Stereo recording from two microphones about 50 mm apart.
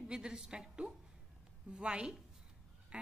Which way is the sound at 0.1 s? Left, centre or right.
Centre.